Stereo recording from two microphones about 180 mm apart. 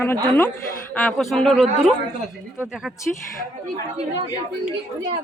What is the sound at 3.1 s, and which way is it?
Speech, 5° left (ahead or behind).